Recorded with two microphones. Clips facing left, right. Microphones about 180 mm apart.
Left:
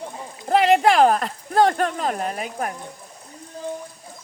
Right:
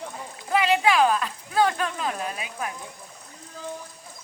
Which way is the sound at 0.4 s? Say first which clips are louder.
Left 5 dB; 50° left (ahead or behind).